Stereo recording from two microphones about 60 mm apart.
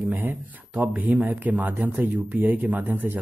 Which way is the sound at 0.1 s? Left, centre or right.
Right.